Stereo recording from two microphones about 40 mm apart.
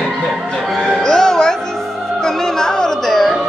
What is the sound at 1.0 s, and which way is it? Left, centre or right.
Music, centre.